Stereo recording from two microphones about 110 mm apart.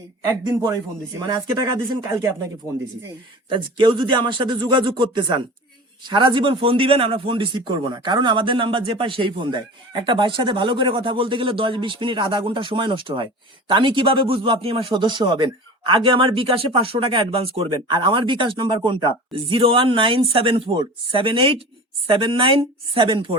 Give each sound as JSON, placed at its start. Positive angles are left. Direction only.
{"t": 1.3, "sound": "speech", "side_deg": -35}
{"t": 3.5, "sound": "a man's voice", "side_deg": -50}
{"t": 15.0, "sound": "a man's voice", "side_deg": -45}
{"t": 17.6, "sound": "a man's voice", "side_deg": -45}